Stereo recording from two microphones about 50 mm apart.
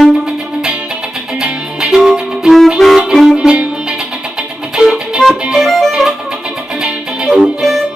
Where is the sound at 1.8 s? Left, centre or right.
Centre.